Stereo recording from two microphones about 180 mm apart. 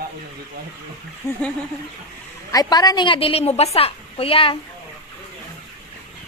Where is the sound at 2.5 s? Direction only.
20° left (ahead or behind).